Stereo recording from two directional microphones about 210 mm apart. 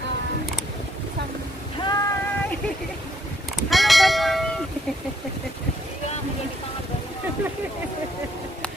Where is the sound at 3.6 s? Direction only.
Centre (ahead or behind).